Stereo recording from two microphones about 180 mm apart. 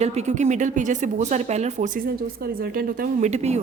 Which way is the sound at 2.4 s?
55° right (ahead or behind).